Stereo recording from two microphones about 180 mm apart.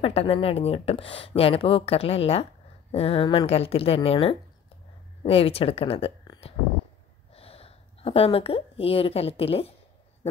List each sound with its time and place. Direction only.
0.0 s a woman's voice: 30° left (ahead or behind)